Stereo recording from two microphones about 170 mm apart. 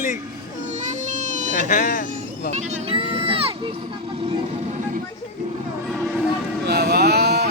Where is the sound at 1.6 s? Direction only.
55° left (ahead or behind).